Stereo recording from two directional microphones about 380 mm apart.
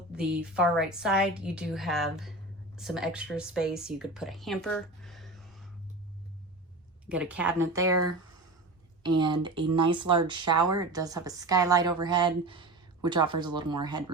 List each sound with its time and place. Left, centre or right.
0.1 s a woman's voice: centre
7.1 s a woman's voice: centre
7.9 s speech: right
9.0 s a woman's voice: centre